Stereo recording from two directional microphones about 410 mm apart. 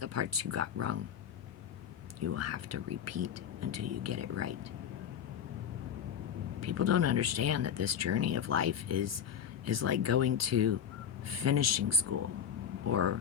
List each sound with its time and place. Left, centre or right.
0.0 s speech: right
2.2 s speech: right
6.6 s speech: right